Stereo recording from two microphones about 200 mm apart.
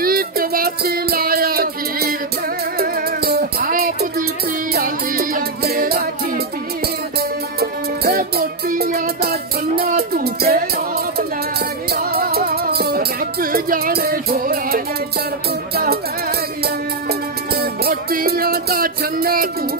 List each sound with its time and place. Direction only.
0.0 s music: 45° right (ahead or behind)
8.0 s music: 50° right (ahead or behind)
11.9 s music: 50° right (ahead or behind)